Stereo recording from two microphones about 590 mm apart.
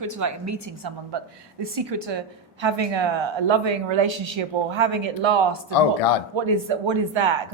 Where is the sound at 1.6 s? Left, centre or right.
Right.